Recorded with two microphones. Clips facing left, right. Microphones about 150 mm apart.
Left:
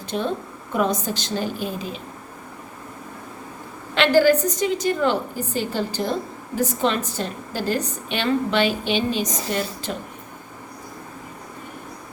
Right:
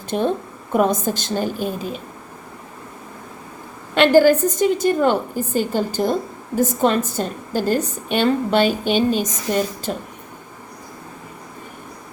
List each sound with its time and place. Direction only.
0.1 s a woman's voice: 45° right (ahead or behind)
3.9 s a woman's voice: 50° right (ahead or behind)